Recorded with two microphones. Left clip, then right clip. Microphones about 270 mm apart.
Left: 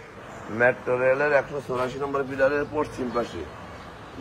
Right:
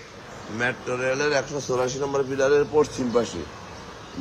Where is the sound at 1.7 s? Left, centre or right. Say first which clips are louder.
Right 4 dB; centre.